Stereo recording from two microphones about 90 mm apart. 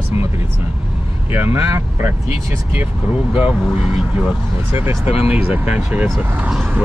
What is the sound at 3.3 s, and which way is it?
Speech, 10° right (ahead or behind).